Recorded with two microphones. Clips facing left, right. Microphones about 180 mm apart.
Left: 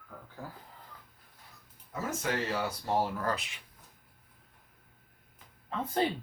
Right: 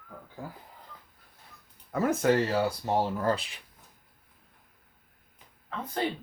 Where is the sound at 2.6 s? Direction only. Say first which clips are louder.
Right 3 dB; 25° right (ahead or behind).